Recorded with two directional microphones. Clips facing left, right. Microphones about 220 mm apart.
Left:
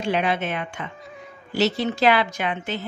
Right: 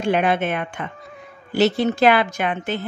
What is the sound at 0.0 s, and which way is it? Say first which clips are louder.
Speech: right 4 dB; 50° right (ahead or behind).